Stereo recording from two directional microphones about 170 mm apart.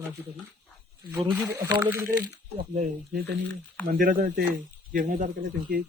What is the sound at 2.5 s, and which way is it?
Speech, 40° right (ahead or behind).